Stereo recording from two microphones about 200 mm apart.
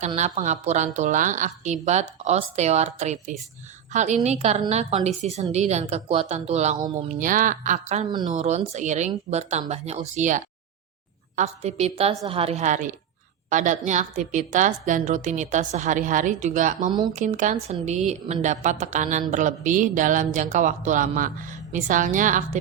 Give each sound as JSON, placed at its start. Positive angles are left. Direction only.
{"t": 0.2, "sound": "a woman's voice", "side_deg": -35}
{"t": 6.7, "sound": "speech", "side_deg": -20}
{"t": 7.2, "sound": "a woman's voice", "side_deg": -40}
{"t": 16.9, "sound": "speech", "side_deg": -20}
{"t": 17.2, "sound": "a woman's voice", "side_deg": -40}